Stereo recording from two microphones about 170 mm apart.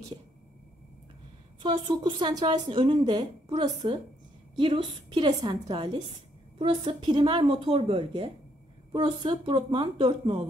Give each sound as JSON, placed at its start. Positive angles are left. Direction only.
{"t": 1.6, "sound": "speech", "side_deg": -25}